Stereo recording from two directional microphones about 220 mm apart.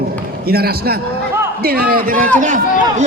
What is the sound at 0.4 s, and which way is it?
A man's voice, 45° right (ahead or behind).